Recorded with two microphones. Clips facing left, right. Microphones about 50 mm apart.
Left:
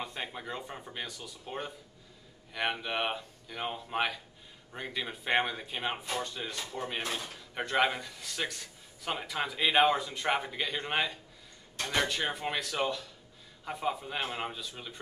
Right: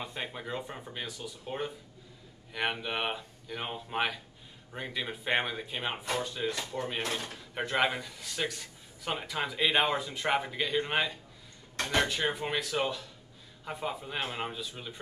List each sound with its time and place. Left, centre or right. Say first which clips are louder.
0.0 s speech: even; centre